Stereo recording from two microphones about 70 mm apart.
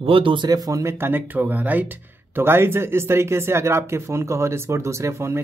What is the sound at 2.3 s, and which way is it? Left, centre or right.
Speech, right.